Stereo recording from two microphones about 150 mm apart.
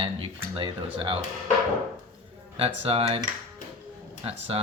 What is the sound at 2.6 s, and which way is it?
Mantra, 40° right (ahead or behind).